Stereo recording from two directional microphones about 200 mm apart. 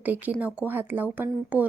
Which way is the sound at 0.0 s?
10° right (ahead or behind).